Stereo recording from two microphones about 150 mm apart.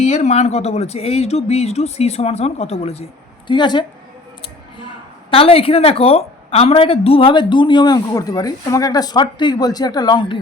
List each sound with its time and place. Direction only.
0.0 s speech: 50° left (ahead or behind); by 3.8 s 30° left (ahead or behind)
5.3 s a woman's voice: 40° left (ahead or behind)